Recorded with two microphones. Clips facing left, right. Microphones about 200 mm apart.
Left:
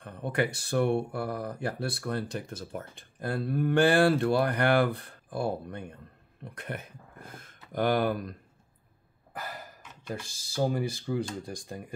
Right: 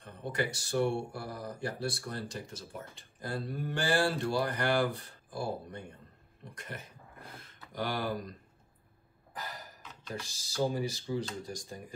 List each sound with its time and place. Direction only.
0.0 s speech: 60° left (ahead or behind)
10.2 s speech: 55° left (ahead or behind)